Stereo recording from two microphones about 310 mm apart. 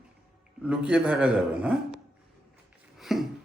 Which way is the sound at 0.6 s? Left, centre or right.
Centre.